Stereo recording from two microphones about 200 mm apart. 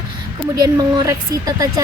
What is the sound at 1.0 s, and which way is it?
Speech, 15° right (ahead or behind).